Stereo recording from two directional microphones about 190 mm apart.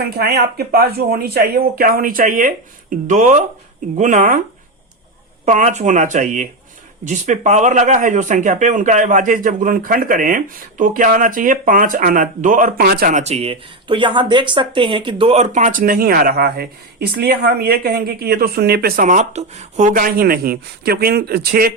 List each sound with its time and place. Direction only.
0.2 s speech: 55° right (ahead or behind)
5.5 s speech: 40° right (ahead or behind)